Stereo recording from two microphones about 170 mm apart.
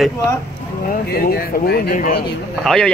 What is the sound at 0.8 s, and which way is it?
Speech, 60° left (ahead or behind).